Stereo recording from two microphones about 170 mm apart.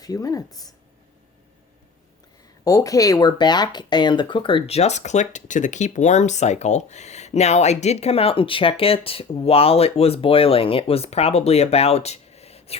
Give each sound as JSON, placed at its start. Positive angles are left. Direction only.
{"t": 0.0, "sound": "speech", "side_deg": 20}
{"t": 2.6, "sound": "speech", "side_deg": 20}